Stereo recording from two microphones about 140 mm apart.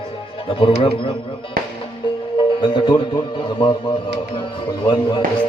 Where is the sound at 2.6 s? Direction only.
35° left (ahead or behind).